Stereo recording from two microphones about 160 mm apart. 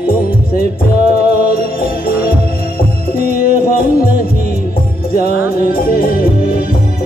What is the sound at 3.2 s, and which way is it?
Music, 65° left (ahead or behind).